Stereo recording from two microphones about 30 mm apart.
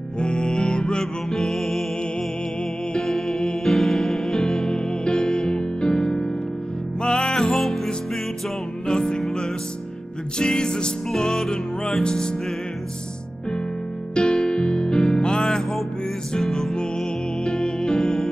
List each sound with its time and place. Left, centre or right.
0.2 s music: left
1.3 s music: centre
3.0 s music: centre
4.7 s music: left; by 7.9 s centre
8.8 s music: left
10.4 s music: left
11.1 s music: centre
12.0 s music: left
14.1 s music: left
16.3 s music: centre
17.5 s music: left